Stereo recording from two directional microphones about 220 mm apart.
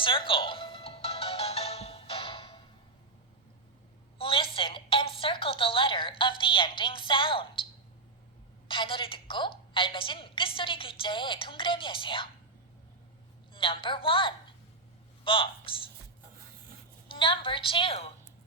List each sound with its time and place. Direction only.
0.0 s music: 25° left (ahead or behind)
4.2 s a sound: 25° left (ahead or behind)
8.6 s a woman's voice: 25° left (ahead or behind)
13.5 s a woman's voice: 25° left (ahead or behind)
17.1 s a woman's voice: 20° left (ahead or behind)